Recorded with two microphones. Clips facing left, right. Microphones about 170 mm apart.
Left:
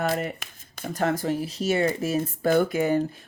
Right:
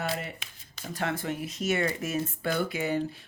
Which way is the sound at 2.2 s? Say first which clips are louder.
Left 9 dB; 50° left (ahead or behind).